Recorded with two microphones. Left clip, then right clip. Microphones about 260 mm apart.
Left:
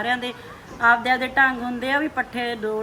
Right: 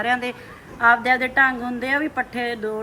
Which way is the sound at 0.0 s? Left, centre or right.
Centre.